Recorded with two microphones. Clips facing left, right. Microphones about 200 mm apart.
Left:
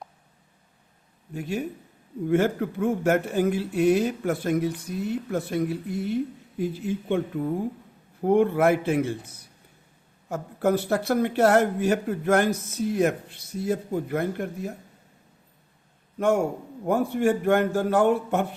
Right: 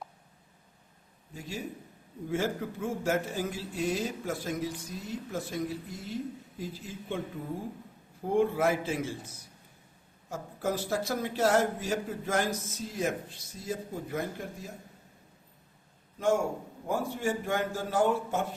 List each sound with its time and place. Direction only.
1.3 s speech: 60° left (ahead or behind)
8.2 s speech: 60° left (ahead or behind)
16.1 s a man's voice: 60° left (ahead or behind)